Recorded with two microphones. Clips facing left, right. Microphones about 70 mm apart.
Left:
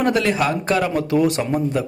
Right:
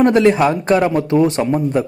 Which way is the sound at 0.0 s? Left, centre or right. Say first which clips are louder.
Right 7 dB; right.